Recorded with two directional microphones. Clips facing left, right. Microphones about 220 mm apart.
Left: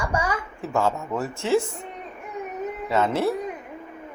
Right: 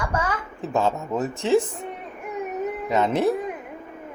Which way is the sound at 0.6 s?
20° right (ahead or behind).